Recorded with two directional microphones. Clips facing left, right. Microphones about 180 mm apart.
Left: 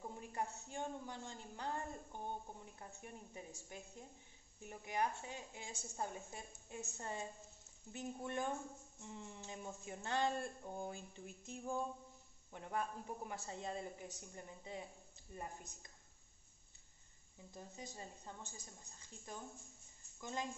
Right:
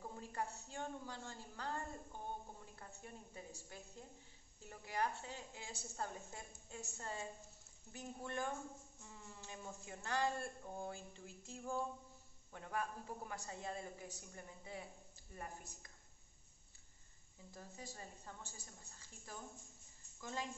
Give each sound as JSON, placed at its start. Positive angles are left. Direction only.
{"t": 0.0, "sound": "a woman's voice", "side_deg": 20}
{"t": 17.6, "sound": "a woman's voice", "side_deg": 20}